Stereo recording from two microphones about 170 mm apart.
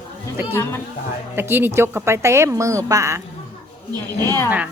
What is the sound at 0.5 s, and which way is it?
Speech, 15° left (ahead or behind).